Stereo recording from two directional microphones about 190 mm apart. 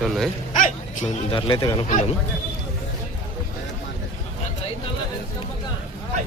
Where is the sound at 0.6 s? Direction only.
40° left (ahead or behind).